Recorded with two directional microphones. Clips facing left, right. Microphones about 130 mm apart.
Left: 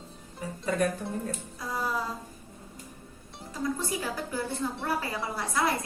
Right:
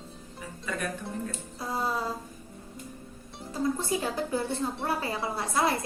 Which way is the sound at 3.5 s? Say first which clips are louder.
Right 3 dB; 30° right (ahead or behind).